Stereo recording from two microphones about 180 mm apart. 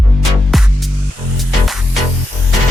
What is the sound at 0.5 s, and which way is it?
Music, centre (ahead or behind).